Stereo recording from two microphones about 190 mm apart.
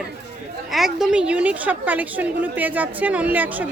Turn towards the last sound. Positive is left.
turn(degrees=-10)  # may be behind; listen again after turning